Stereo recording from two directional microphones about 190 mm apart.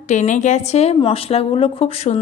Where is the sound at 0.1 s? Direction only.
40° left (ahead or behind).